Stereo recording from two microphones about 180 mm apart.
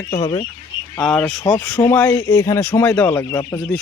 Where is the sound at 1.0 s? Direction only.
5° left (ahead or behind).